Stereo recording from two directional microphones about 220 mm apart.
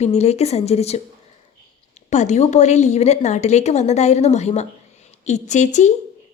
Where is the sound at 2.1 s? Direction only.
30° left (ahead or behind).